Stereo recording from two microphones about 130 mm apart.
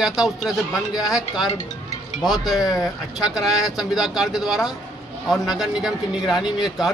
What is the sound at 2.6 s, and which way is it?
Speech, 30° left (ahead or behind).